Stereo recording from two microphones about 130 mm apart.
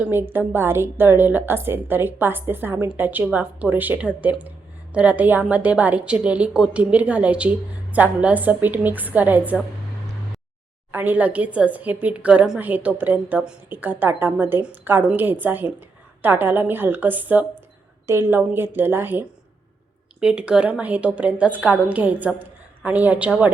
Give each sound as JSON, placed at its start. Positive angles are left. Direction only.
{"t": 0.0, "sound": "a woman's voice", "side_deg": -15}
{"t": 10.9, "sound": "a woman's voice", "side_deg": -15}